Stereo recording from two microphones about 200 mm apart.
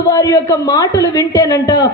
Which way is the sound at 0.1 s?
15° left (ahead or behind).